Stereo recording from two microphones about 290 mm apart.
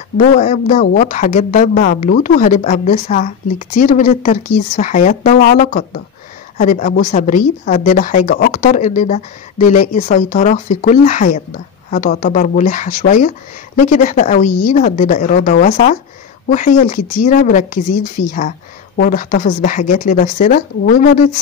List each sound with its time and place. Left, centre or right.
0.4 s a woman's voice: left
18.9 s a woman's voice: left